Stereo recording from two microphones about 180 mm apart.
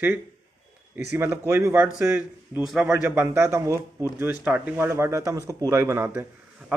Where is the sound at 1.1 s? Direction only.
15° right (ahead or behind).